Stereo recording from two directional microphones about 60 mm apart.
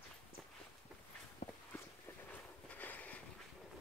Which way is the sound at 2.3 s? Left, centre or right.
Left.